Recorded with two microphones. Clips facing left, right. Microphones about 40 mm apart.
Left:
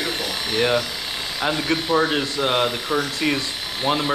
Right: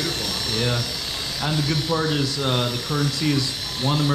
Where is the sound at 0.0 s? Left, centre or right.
Left.